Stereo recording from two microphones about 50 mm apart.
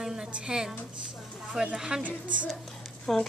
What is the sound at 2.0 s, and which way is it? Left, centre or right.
Speech, right.